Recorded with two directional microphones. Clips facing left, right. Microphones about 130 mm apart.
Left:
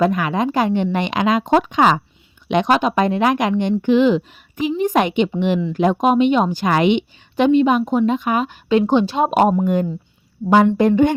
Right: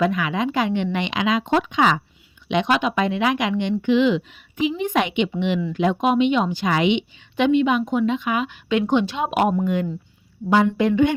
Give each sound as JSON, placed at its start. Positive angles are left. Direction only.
{"t": 0.0, "sound": "a woman's voice", "side_deg": 45}
{"t": 10.8, "sound": "speech", "side_deg": 45}